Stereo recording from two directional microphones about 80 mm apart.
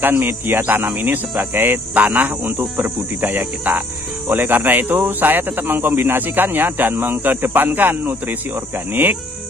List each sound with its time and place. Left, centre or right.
0.0 s speech: right